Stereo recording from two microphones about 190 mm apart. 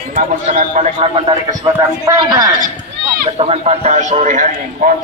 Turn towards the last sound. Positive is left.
turn(degrees=-40)  # may be behind; listen again after turning